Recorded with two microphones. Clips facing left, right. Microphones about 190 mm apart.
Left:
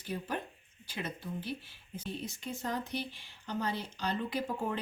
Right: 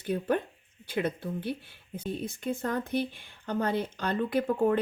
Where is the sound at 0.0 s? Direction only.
55° right (ahead or behind).